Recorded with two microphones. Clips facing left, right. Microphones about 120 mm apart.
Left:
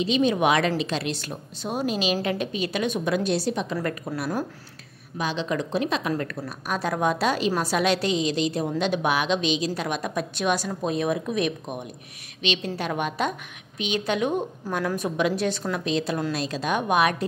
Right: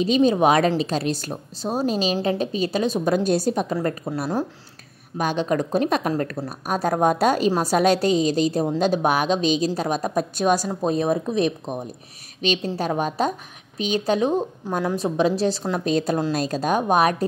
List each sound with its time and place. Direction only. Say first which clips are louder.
0.0 s a woman's voice: right 4 dB; 40° right (ahead or behind)
3.7 s a woman's voice: right 4 dB; 30° right (ahead or behind)
5.1 s a woman's voice: right 5 dB; 50° right (ahead or behind)
6.1 s a woman's voice: right 4 dB; 35° right (ahead or behind)